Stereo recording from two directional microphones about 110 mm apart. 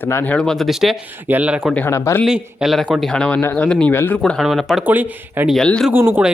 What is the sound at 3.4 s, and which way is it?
Speech, 20° left (ahead or behind).